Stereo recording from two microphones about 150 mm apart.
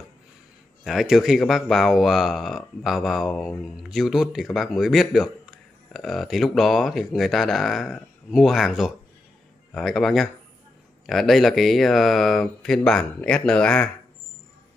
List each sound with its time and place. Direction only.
0.8 s speech: centre (ahead or behind)